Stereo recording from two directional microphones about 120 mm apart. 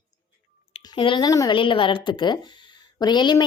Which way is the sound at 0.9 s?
40° left (ahead or behind).